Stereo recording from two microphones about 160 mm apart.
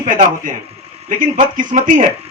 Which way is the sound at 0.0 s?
50° right (ahead or behind).